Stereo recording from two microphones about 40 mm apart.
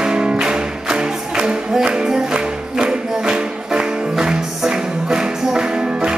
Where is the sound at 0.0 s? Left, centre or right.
Right.